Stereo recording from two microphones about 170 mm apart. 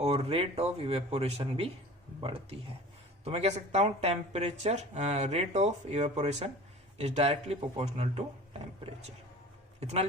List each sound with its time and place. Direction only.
0.0 s speech: 35° right (ahead or behind)
9.8 s speech: 40° right (ahead or behind)